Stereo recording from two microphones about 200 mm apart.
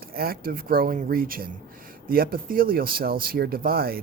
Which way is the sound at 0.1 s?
50° right (ahead or behind).